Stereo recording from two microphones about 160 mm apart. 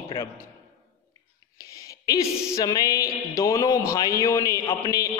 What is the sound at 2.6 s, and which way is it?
A man's voice, 20° left (ahead or behind).